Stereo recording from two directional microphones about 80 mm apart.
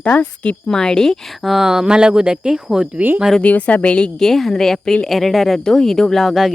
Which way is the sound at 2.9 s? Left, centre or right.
Right.